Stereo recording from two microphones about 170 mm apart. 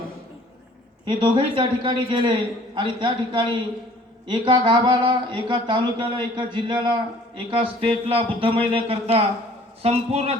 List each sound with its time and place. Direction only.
1.0 s speech: 30° right (ahead or behind)